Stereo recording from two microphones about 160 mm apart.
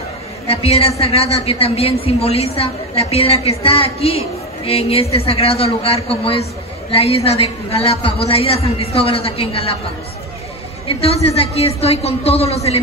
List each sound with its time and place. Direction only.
0.5 s a woman's voice: 40° left (ahead or behind)
10.9 s a woman's voice: 35° left (ahead or behind)